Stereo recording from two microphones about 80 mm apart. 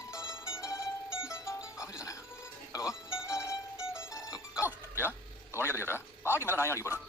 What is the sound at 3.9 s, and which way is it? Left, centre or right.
Mandolin, left.